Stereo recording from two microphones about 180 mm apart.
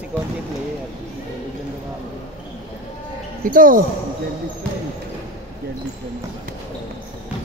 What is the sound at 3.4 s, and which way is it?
Speech, 50° right (ahead or behind).